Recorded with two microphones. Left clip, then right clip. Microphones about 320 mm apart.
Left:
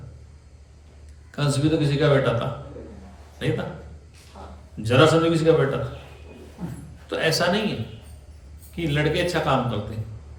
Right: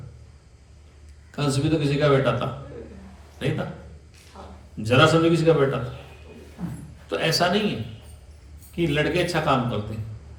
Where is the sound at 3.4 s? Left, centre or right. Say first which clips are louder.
Left 2 dB; centre.